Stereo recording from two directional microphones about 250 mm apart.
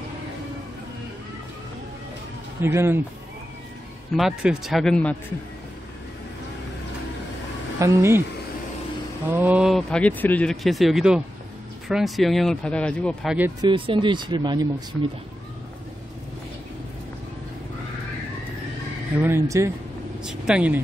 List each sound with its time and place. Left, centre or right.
2.6 s speech: centre
4.1 s speech: centre
7.8 s speech: centre
9.3 s speech: centre
13.6 s speech: centre
19.1 s speech: centre